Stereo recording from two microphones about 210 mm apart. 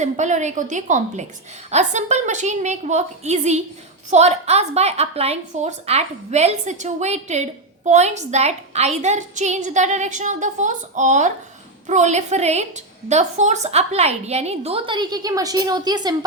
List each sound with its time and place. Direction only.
0.0 s a woman's voice: 35° right (ahead or behind); by 16.1 s 20° right (ahead or behind)